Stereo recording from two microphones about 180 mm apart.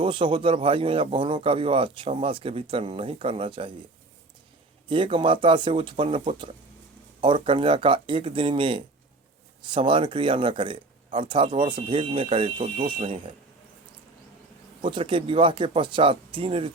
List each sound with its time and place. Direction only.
0.0 s a man's voice: 30° right (ahead or behind)
4.9 s a man's voice: 30° right (ahead or behind)
14.8 s a man's voice: 30° right (ahead or behind)